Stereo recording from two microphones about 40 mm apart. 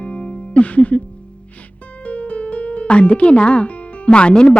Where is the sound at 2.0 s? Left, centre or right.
Left.